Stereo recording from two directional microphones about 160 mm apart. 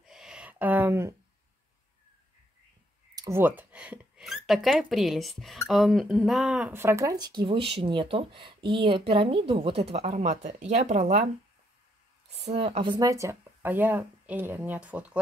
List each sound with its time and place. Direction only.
0.0 s a sound: 5° right (ahead or behind)
3.2 s speech: 15° right (ahead or behind); by 11.2 s 45° right (ahead or behind)
12.4 s speech: 40° right (ahead or behind); by 15.1 s 10° right (ahead or behind)